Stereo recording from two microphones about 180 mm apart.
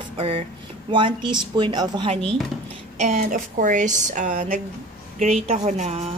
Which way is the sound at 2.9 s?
40° right (ahead or behind).